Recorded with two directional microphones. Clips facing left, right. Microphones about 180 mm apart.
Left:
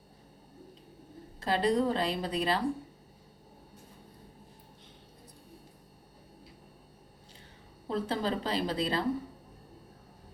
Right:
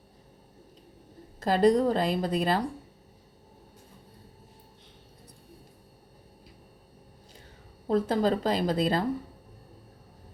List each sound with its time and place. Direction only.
1.4 s a woman's voice: 45° right (ahead or behind)
7.9 s a woman's voice: 45° right (ahead or behind)